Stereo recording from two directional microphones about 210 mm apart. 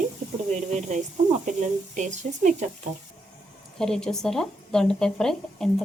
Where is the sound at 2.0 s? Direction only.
35° right (ahead or behind).